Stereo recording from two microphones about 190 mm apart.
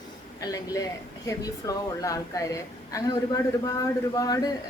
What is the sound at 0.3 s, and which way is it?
Speech, 20° left (ahead or behind).